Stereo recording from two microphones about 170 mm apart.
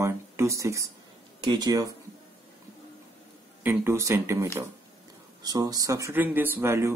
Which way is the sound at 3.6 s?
15° right (ahead or behind).